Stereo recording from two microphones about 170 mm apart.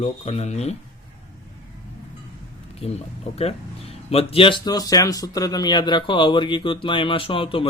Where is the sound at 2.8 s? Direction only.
40° left (ahead or behind).